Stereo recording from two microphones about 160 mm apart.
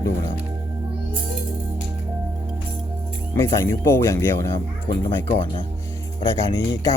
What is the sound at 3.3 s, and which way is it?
Speech, 15° left (ahead or behind).